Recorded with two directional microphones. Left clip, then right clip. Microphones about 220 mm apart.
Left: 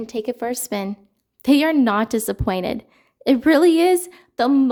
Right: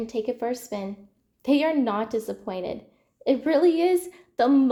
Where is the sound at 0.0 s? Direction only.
35° left (ahead or behind).